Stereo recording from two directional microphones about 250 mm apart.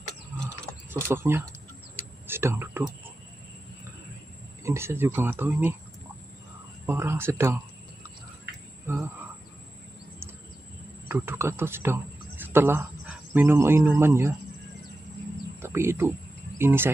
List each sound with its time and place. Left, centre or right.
0.8 s speech: centre
4.6 s speech: centre
6.9 s speech: centre
8.8 s speech: centre
11.1 s speech: centre
15.6 s speech: centre